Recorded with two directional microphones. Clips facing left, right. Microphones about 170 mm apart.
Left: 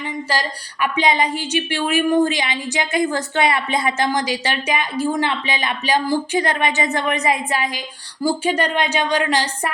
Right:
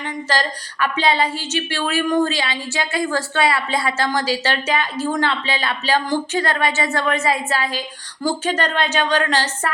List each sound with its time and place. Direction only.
0.0 s a woman's voice: 10° left (ahead or behind)